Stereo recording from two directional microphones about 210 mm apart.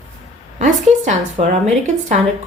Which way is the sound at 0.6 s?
35° right (ahead or behind).